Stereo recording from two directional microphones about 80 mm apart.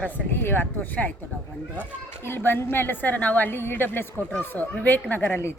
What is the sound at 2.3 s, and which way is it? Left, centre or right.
A woman's voice, left.